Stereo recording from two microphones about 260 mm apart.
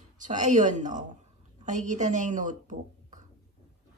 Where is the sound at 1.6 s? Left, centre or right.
Right.